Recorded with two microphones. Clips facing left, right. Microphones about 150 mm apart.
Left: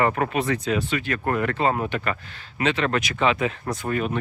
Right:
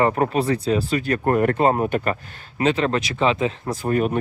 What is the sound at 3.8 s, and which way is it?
Speech, 40° right (ahead or behind).